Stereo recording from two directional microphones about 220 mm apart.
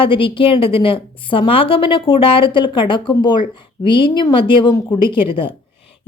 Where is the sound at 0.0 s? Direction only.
20° left (ahead or behind).